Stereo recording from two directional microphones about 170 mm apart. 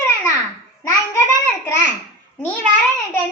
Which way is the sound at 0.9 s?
15° left (ahead or behind).